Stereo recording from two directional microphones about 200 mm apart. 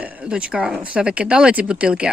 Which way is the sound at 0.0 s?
5° right (ahead or behind).